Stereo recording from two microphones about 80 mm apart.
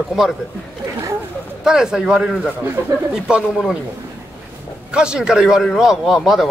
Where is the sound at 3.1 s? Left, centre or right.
Centre.